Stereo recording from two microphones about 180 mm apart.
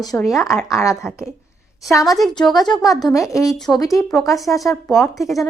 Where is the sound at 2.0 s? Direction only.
Centre (ahead or behind).